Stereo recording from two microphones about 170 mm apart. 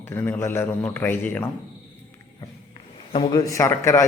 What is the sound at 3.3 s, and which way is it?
Speech, 20° left (ahead or behind).